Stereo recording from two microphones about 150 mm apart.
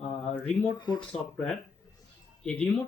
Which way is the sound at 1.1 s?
5° left (ahead or behind).